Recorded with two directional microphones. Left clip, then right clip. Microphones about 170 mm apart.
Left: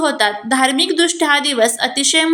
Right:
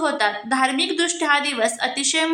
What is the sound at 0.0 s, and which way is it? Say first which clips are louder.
A woman's voice: left 5 dB; 25° left (ahead or behind).